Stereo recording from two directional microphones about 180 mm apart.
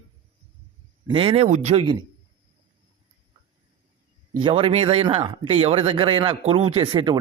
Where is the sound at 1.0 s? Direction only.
30° right (ahead or behind).